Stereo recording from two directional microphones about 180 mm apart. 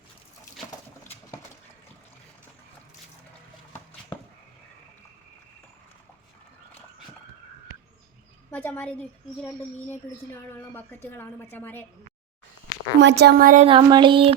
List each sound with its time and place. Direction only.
8.4 s a woman's voice: 10° left (ahead or behind)
10.5 s a woman's voice: 10° left (ahead or behind)
13.0 s a woman's voice: 75° right (ahead or behind); by 13.7 s 50° right (ahead or behind)
13.7 s a sound: 25° right (ahead or behind)